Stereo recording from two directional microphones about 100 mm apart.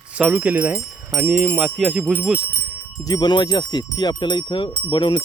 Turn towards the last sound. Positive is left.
turn(degrees=55)  # may be behind; listen again after turning